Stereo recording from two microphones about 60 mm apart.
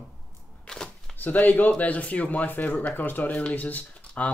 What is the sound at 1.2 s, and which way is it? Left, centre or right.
Speech, left.